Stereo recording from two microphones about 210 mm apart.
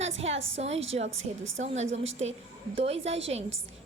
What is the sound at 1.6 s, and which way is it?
A woman's voice, 30° right (ahead or behind).